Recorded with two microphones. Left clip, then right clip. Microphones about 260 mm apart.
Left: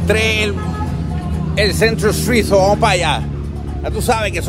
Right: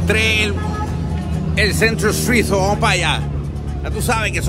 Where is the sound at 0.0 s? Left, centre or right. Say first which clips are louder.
Left 1 dB; centre.